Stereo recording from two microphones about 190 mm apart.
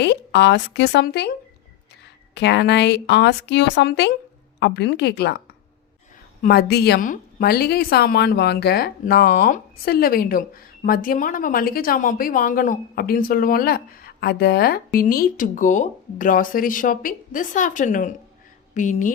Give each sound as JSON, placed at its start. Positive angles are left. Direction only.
{"t": 0.0, "sound": "a woman's voice", "side_deg": 65}
{"t": 2.3, "sound": "a woman's voice", "side_deg": 65}
{"t": 6.4, "sound": "a woman's voice", "side_deg": 55}